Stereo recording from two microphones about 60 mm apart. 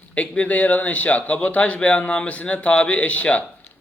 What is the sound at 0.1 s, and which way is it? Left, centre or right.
A man's voice, left.